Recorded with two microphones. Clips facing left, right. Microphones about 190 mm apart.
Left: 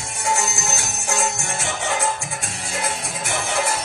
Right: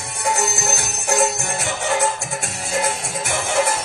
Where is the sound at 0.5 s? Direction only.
60° right (ahead or behind).